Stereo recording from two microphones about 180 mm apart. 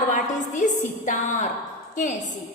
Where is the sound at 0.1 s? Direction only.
45° left (ahead or behind).